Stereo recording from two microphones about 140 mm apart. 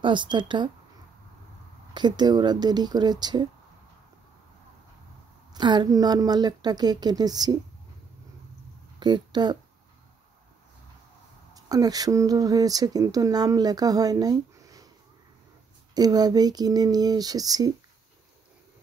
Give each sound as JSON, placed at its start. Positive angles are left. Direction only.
{"t": 0.0, "sound": "speech", "side_deg": -35}
{"t": 2.0, "sound": "speech", "side_deg": -30}
{"t": 5.5, "sound": "speech", "side_deg": -35}
{"t": 9.0, "sound": "speech", "side_deg": -30}
{"t": 11.5, "sound": "speech", "side_deg": -25}
{"t": 15.9, "sound": "speech", "side_deg": -30}